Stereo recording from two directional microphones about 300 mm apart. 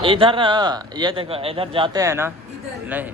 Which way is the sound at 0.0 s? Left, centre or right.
Centre.